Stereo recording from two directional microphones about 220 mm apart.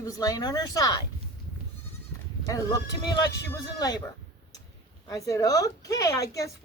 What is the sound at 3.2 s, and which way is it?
Speech, 15° left (ahead or behind).